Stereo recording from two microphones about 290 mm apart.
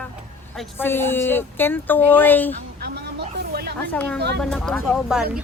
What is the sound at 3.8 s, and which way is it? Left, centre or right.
A woman's voice, centre.